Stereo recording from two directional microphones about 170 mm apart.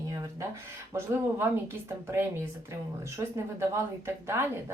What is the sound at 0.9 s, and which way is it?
Speech, 15° right (ahead or behind).